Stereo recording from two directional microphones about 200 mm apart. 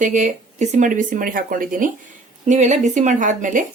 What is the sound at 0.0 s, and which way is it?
Speech, 40° right (ahead or behind).